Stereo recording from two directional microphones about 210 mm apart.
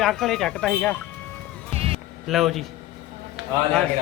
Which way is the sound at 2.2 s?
Centre (ahead or behind).